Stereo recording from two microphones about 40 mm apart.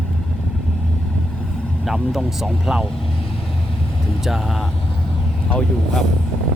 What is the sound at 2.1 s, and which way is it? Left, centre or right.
Speech, centre.